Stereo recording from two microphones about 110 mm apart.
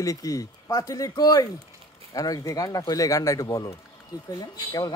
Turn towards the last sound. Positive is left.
turn(degrees=35)  # may be behind; listen again after turning